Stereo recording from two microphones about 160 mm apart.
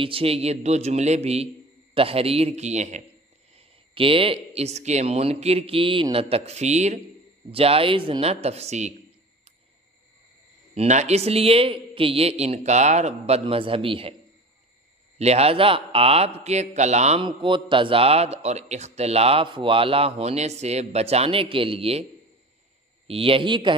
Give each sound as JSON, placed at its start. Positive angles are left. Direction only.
{"t": 0.0, "sound": "a man's voice", "side_deg": -35}
{"t": 3.5, "sound": "a man's voice", "side_deg": -35}
{"t": 10.7, "sound": "a man's voice", "side_deg": -45}
{"t": 15.1, "sound": "a man's voice", "side_deg": -40}
{"t": 17.2, "sound": "a man's voice", "side_deg": -30}
{"t": 23.0, "sound": "a man's voice", "side_deg": -35}